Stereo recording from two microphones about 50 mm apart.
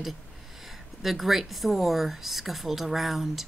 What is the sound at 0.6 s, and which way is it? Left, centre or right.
A woman's voice, centre.